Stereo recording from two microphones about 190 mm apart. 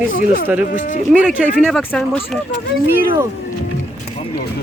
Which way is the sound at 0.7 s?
40° left (ahead or behind).